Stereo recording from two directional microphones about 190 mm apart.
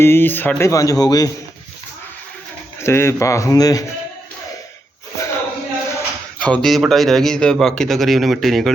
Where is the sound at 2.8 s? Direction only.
15° left (ahead or behind).